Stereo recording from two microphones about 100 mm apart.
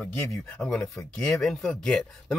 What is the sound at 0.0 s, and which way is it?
Speech, centre (ahead or behind).